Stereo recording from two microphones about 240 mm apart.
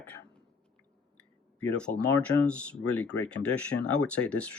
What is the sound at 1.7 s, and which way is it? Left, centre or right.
Speech, centre.